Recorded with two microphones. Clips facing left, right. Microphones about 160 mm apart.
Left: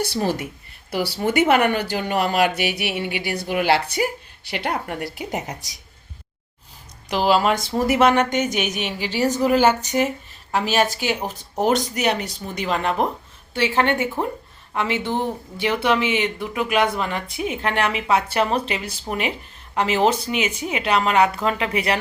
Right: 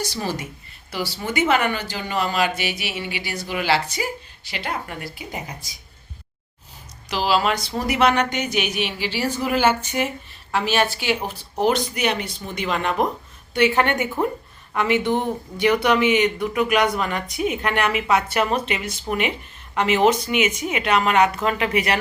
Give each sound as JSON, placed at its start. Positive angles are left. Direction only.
{"t": 0.9, "sound": "a woman's voice", "side_deg": 60}
{"t": 7.1, "sound": "a woman's voice", "side_deg": 50}